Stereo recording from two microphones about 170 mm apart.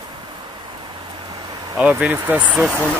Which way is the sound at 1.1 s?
25° right (ahead or behind).